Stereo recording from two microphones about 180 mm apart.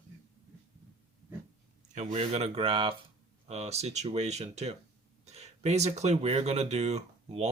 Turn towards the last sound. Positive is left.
turn(degrees=-35)  # may be behind; listen again after turning